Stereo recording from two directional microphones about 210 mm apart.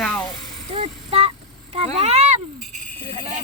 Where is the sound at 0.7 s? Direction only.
30° right (ahead or behind).